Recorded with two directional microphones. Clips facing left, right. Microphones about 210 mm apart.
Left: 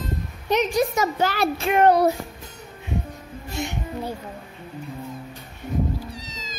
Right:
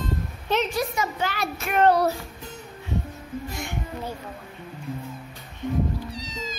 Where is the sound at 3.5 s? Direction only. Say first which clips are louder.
Left 4 dB; 20° left (ahead or behind).